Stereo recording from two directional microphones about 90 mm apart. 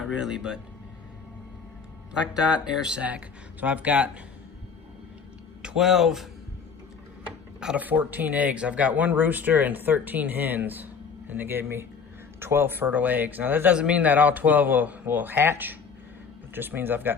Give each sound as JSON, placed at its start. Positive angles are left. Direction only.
{"t": 0.0, "sound": "speech", "side_deg": -5}
{"t": 2.3, "sound": "speech", "side_deg": -10}
{"t": 5.6, "sound": "speech", "side_deg": -5}
{"t": 7.6, "sound": "speech", "side_deg": -15}